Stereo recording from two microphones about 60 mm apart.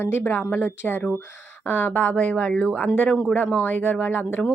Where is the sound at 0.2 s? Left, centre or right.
Left.